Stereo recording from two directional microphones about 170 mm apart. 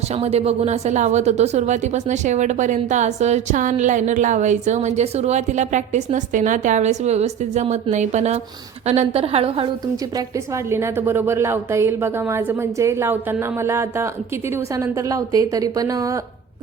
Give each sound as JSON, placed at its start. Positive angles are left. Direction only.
{"t": 0.2, "sound": "a woman's voice", "side_deg": -35}
{"t": 10.7, "sound": "a woman's voice", "side_deg": -15}